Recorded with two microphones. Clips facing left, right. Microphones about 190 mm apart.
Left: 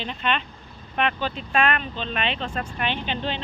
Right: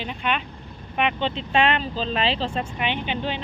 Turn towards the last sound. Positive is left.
turn(degrees=-10)  # may be behind; listen again after turning